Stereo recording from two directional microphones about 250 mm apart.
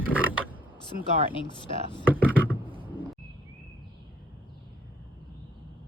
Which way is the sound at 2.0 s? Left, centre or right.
Centre.